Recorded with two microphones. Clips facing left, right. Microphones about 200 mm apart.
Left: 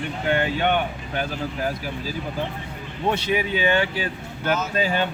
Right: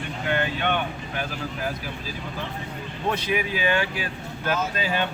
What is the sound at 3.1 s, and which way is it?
Speech, 25° left (ahead or behind).